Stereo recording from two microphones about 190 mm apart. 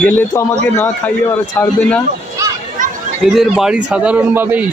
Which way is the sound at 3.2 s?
Centre (ahead or behind).